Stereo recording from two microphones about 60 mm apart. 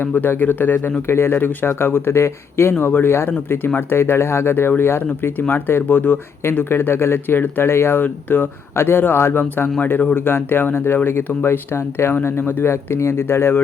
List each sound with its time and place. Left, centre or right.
0.0 s speech: left